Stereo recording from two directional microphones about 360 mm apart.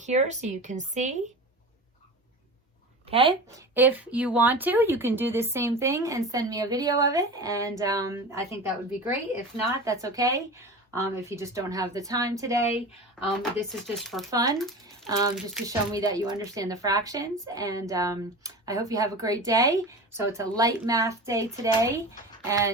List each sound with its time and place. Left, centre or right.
0.0 s speech: centre
3.1 s speech: centre
9.8 s speech: centre